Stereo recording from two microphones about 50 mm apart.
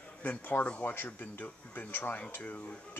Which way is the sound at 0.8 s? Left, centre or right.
Left.